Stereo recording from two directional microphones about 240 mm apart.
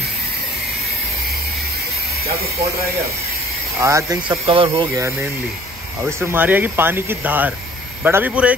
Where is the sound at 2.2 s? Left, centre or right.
Right.